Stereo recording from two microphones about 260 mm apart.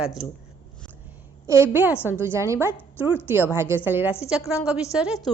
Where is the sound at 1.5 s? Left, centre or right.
Centre.